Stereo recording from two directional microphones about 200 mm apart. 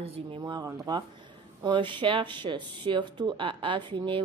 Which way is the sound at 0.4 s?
20° right (ahead or behind).